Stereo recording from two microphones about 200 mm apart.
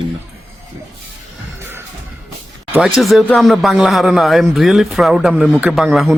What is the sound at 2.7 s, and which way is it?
Speech, 5° right (ahead or behind).